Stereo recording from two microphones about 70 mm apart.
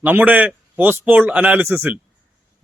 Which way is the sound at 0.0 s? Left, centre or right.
Right.